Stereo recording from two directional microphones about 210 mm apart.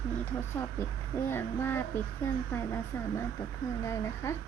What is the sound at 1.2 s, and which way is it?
Speech, 10° left (ahead or behind).